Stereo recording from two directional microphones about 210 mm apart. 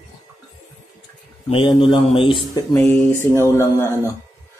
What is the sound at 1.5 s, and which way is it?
Speech, 25° left (ahead or behind).